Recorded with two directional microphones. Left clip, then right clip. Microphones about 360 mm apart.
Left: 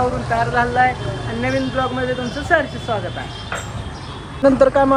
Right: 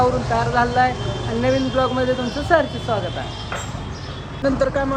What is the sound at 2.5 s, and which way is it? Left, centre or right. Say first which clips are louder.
Speech: even; centre.